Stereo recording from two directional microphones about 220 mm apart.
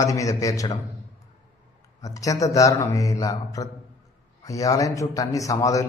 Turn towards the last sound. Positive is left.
turn(degrees=15)  # may be behind; listen again after turning